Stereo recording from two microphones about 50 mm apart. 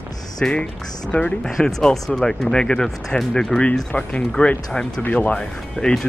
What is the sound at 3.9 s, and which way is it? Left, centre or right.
Speech, left.